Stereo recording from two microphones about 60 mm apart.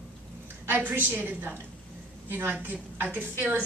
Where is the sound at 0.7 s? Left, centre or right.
Right.